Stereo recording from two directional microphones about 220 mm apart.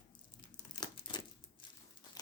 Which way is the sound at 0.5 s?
20° left (ahead or behind).